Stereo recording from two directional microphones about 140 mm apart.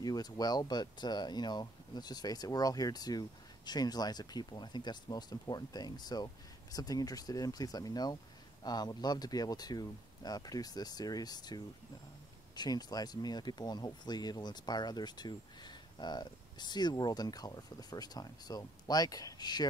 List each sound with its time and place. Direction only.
0.0 s speech: 30° left (ahead or behind)